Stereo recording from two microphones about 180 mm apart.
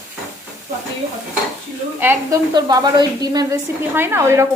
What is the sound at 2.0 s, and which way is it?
A woman's voice, 15° right (ahead or behind).